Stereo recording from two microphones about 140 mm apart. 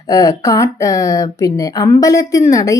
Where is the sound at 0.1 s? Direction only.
25° left (ahead or behind).